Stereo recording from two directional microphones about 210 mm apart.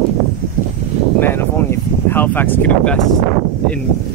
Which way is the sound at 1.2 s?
10° left (ahead or behind).